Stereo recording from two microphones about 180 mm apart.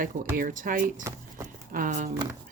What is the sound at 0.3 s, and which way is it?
Speech, 50° right (ahead or behind).